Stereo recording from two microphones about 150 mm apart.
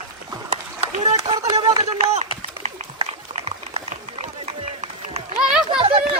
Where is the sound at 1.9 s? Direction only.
50° right (ahead or behind).